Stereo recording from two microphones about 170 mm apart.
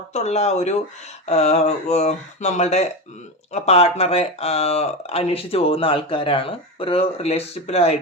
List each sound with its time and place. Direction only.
0.1 s speech: 40° left (ahead or behind)